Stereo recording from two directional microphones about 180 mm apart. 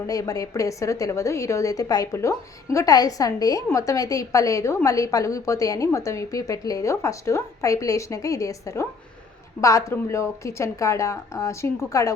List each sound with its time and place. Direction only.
0.1 s a woman's voice: 20° left (ahead or behind)